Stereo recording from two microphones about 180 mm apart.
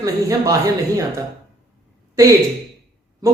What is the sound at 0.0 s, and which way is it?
Speech, 20° right (ahead or behind).